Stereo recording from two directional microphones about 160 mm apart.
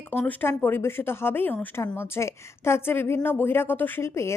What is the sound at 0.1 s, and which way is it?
Speech, 10° left (ahead or behind).